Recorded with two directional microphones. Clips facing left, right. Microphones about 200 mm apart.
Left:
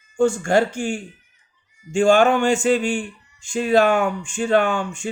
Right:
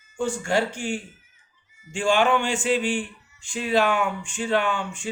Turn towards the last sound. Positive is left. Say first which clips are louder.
# left 5 dB
turn(degrees=45)  # may be behind; listen again after turning